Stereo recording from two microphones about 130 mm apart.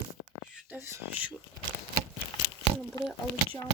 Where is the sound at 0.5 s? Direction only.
15° right (ahead or behind).